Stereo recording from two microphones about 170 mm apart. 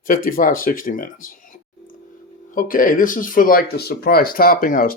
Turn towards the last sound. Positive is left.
turn(degrees=55)  # may be behind; listen again after turning